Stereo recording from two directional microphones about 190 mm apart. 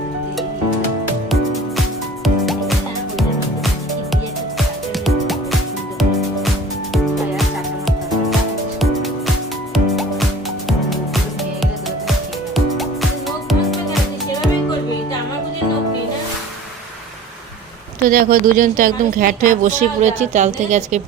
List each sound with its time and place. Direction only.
2.2 s music: centre (ahead or behind)
5.0 s music: centre (ahead or behind)
7.9 s music: centre (ahead or behind)
12.5 s music: centre (ahead or behind)
18.1 s a woman's voice: 50° right (ahead or behind)